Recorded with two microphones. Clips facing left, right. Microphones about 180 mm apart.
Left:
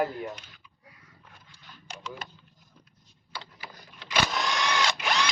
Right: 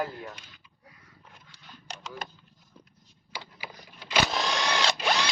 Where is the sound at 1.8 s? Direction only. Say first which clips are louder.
Even; 40° right (ahead or behind).